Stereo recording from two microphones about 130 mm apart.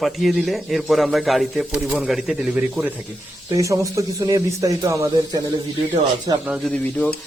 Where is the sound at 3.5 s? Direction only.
25° right (ahead or behind).